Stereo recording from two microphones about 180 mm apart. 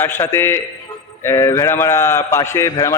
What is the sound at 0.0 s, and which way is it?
A man's voice, 15° left (ahead or behind).